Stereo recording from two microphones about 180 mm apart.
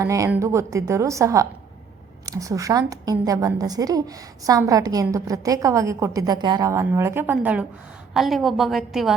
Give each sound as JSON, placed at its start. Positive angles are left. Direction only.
{"t": 0.0, "sound": "a woman's voice", "side_deg": -15}